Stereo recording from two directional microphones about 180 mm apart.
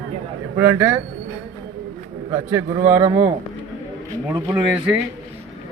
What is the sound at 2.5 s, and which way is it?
Speech, 15° right (ahead or behind).